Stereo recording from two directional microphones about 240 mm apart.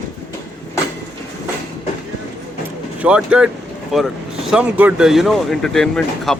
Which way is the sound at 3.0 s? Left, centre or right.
Centre.